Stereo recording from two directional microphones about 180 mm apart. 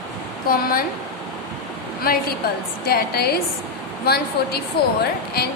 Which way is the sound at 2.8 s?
60° left (ahead or behind).